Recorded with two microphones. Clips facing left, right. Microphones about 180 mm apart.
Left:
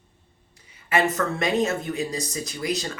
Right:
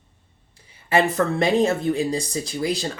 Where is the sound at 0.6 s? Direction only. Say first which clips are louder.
Right 3 dB; 30° right (ahead or behind).